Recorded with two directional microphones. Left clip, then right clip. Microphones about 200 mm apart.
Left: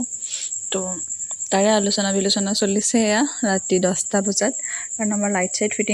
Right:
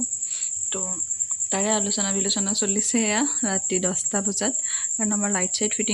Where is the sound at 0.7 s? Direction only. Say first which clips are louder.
Left 7 dB; 25° left (ahead or behind).